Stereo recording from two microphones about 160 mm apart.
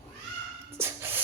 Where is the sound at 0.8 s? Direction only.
15° right (ahead or behind).